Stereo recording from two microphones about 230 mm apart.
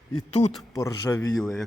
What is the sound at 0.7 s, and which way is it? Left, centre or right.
Speech, centre.